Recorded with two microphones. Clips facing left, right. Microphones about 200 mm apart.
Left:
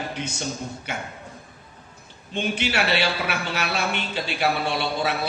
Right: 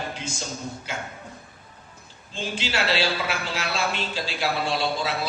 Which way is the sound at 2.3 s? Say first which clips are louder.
Left 4 dB; 65° left (ahead or behind).